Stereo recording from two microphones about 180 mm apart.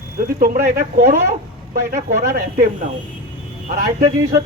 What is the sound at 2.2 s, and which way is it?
Speech, 60° right (ahead or behind).